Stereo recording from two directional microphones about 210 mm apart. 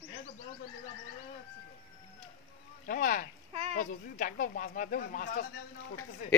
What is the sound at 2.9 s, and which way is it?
Speech, 40° left (ahead or behind).